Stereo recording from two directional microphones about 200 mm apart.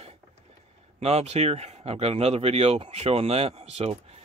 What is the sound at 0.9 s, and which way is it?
Speech, 30° right (ahead or behind).